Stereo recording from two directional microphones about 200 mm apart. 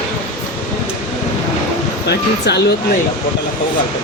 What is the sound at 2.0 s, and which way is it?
Speech, 55° left (ahead or behind).